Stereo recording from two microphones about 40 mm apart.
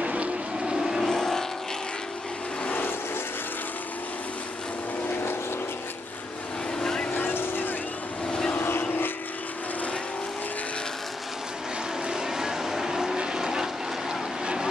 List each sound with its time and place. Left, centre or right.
0.0 s vehicle: right
0.7 s vehicle: centre
1.0 s vehicle: centre
6.8 s vehicle: centre
7.1 s vehicle: left
8.3 s vehicle: left
8.5 s vehicle: left
12.1 s vehicle: centre